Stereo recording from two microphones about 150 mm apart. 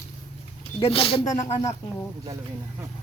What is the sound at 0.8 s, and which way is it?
Speech, 40° left (ahead or behind).